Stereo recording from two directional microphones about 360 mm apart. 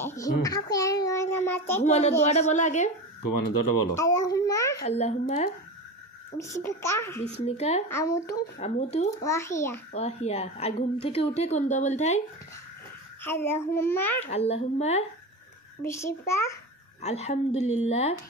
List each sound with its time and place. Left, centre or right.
0.0 s a woman's voice: centre
1.8 s a woman's voice: centre
3.2 s speech: left
3.9 s a woman's voice: centre
7.2 s a woman's voice: centre
8.5 s a woman's voice: centre
9.9 s a woman's voice: centre
13.2 s a woman's voice: centre
14.2 s a woman's voice: centre